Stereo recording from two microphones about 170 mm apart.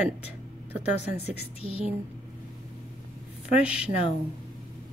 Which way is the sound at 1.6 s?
35° left (ahead or behind).